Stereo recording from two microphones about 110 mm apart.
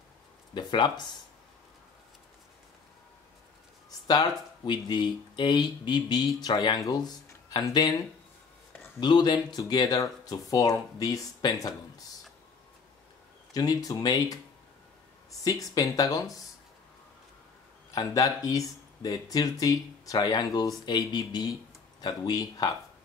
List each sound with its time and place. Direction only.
0.6 s speech: 45° left (ahead or behind)
4.1 s speech: 40° left (ahead or behind)
9.0 s speech: 45° left (ahead or behind)
13.5 s speech: 35° left (ahead or behind)
15.4 s speech: 30° left (ahead or behind)
17.9 s speech: 30° left (ahead or behind)